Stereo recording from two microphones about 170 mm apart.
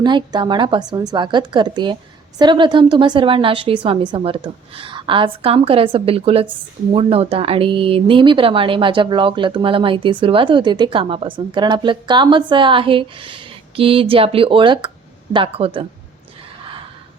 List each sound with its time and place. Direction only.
0.0 s speech: 25° right (ahead or behind)